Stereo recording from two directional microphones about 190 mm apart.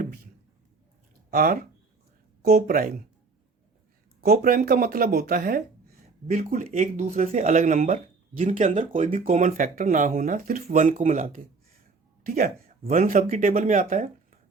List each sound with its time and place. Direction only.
1.3 s speech: 50° right (ahead or behind)
4.2 s speech: 50° right (ahead or behind)